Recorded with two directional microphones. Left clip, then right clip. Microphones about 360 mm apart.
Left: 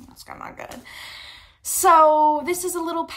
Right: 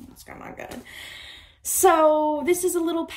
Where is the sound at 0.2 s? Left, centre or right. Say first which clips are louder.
Left 3 dB; centre.